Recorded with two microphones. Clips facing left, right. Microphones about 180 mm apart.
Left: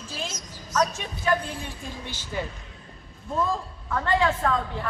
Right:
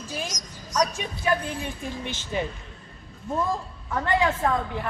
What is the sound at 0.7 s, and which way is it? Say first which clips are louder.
Speech: even; 15° right (ahead or behind).